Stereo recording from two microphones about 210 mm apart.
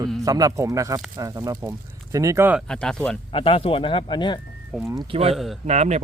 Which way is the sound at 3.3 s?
25° left (ahead or behind).